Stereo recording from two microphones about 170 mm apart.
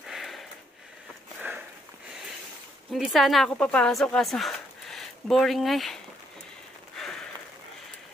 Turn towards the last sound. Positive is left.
turn(degrees=0)  # may be behind; listen again after turning